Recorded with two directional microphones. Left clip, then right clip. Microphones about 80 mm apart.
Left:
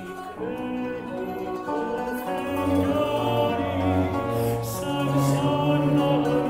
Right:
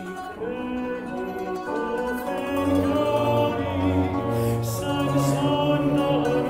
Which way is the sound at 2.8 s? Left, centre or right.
Centre.